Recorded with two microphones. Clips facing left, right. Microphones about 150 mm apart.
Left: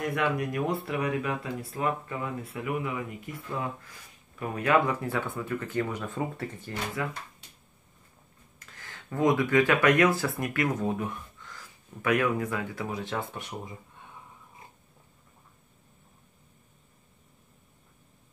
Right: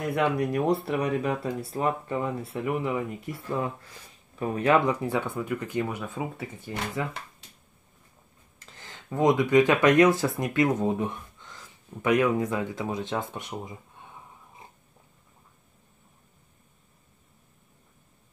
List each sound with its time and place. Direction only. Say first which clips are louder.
0.1 s speech: right 3 dB; 30° right (ahead or behind)
4.4 s speech: right 2 dB; 25° right (ahead or behind)
5.0 s speech: right 3 dB; 15° right (ahead or behind)
8.8 s speech: right 2 dB; 20° right (ahead or behind)